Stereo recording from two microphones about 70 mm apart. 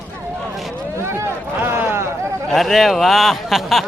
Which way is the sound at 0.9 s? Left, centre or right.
Right.